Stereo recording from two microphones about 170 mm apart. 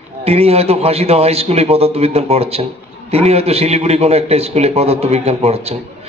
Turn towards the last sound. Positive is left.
turn(degrees=-35)  # may be behind; listen again after turning